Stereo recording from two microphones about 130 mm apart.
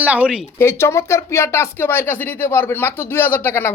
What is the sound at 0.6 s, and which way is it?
Speech, 20° left (ahead or behind).